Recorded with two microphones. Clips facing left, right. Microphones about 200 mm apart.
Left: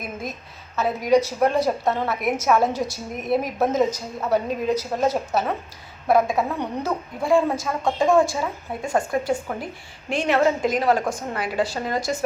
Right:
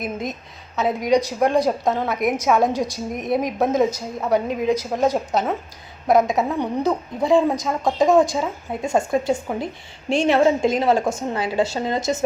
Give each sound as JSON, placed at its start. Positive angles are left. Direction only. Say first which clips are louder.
{"t": 0.0, "sound": "a woman's voice", "louder": "right 5 dB", "side_deg": -20}